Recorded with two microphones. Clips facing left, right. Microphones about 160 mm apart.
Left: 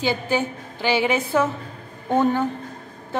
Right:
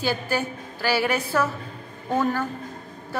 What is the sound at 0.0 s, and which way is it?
A woman's voice, 20° left (ahead or behind).